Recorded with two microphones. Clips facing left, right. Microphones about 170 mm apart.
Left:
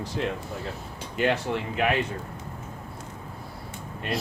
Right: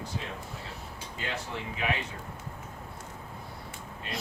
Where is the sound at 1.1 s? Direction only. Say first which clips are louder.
Left 12 dB; 70° left (ahead or behind).